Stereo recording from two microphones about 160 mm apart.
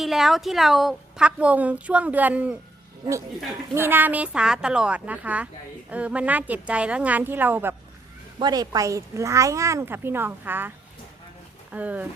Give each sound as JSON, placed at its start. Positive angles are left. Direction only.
{"t": 0.0, "sound": "a woman's voice", "side_deg": 0}
{"t": 3.8, "sound": "a woman's voice", "side_deg": -15}
{"t": 8.4, "sound": "speech", "side_deg": -25}
{"t": 11.7, "sound": "a woman's voice", "side_deg": -10}